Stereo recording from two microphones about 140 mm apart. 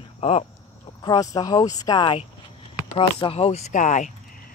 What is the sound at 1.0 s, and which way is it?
Speech, 30° left (ahead or behind).